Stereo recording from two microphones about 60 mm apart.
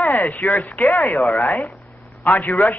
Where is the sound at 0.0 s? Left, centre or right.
Left.